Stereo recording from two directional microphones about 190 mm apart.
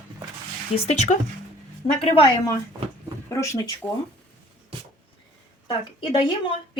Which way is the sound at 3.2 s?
15° left (ahead or behind).